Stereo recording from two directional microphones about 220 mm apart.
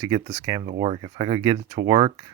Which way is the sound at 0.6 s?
30° right (ahead or behind).